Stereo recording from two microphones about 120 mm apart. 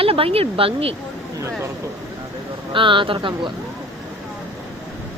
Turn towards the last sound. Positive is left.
turn(degrees=-40)  # may be behind; listen again after turning